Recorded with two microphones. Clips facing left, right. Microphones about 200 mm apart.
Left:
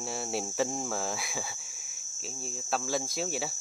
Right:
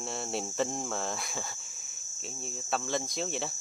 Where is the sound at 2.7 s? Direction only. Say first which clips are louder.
Left 1 dB; 5° left (ahead or behind).